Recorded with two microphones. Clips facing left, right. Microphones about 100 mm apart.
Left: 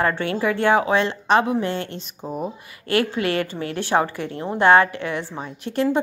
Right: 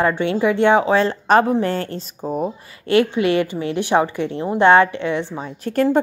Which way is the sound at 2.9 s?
20° right (ahead or behind).